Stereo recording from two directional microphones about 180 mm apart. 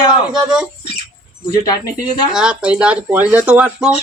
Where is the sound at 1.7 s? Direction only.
20° left (ahead or behind).